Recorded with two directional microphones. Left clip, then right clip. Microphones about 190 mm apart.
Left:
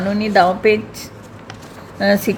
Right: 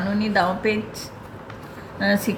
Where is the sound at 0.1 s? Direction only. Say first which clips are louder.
Left 8 dB; 40° left (ahead or behind).